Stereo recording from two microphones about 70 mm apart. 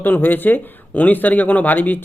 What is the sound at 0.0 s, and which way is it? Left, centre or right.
Speech, left.